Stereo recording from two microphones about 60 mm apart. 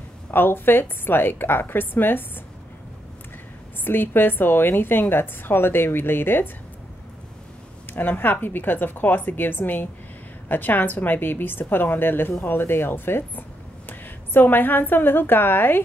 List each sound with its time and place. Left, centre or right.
0.3 s a woman's voice: left
3.8 s a woman's voice: left
7.9 s a woman's voice: left